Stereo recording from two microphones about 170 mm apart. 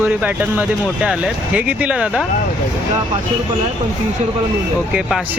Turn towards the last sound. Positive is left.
turn(degrees=-5)  # may be behind; listen again after turning